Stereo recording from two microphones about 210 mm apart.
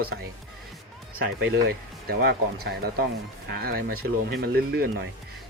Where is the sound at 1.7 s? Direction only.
50° right (ahead or behind).